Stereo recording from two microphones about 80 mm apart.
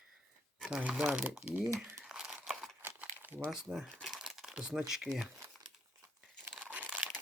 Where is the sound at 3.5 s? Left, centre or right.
Centre.